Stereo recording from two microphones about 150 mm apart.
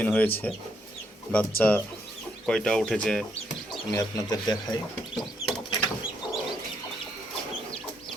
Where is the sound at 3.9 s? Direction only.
25° left (ahead or behind).